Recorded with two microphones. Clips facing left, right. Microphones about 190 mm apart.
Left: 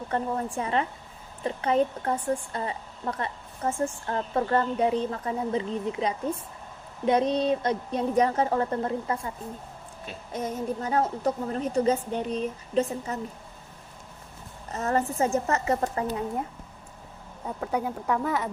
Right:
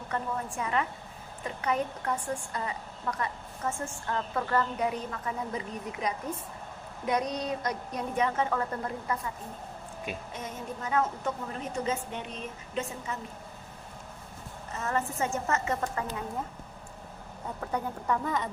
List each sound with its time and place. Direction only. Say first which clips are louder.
0.1 s a woman's voice: left 5 dB; 30° left (ahead or behind)
10.3 s a woman's voice: left 8 dB; 35° left (ahead or behind)
14.7 s a woman's voice: left 5 dB; 35° left (ahead or behind)
17.6 s speech: left 5 dB; 10° left (ahead or behind)